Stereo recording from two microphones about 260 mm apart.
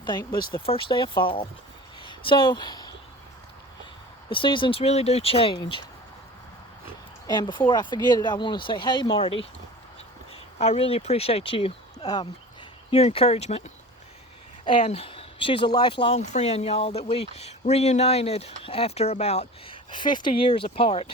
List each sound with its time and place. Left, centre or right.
0.0 s speech: centre
2.0 s a sound: centre
4.3 s speech: centre
7.3 s speech: centre
10.6 s speech: left
14.6 s speech: centre